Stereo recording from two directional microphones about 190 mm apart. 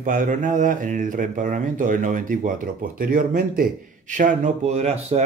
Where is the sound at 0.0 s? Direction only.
45° right (ahead or behind).